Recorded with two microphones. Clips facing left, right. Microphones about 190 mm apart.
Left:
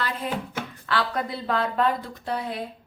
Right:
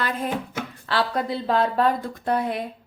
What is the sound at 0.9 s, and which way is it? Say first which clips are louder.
A woman's voice: right 3 dB; 30° right (ahead or behind).